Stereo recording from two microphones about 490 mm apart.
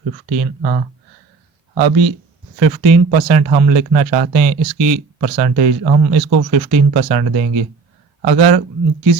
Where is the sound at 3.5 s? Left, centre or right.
Right.